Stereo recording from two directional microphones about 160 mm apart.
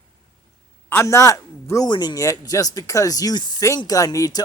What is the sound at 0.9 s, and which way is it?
Speech, 15° left (ahead or behind).